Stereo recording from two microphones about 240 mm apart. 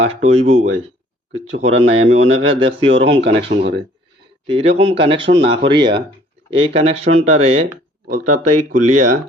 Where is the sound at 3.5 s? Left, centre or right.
Right.